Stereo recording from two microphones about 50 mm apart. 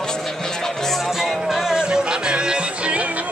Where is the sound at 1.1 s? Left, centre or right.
Centre.